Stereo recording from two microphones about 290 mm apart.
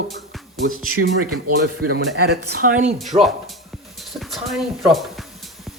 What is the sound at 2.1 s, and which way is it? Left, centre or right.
Speech, right.